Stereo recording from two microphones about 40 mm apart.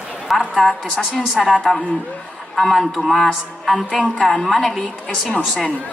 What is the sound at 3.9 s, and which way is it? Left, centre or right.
Speech, left.